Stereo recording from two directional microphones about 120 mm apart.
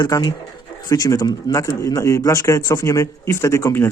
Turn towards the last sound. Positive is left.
turn(degrees=20)  # may be behind; listen again after turning